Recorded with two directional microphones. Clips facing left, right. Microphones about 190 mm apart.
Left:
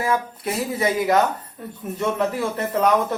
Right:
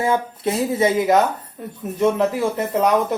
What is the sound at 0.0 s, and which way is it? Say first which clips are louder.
Speech: right 3 dB; 25° right (ahead or behind).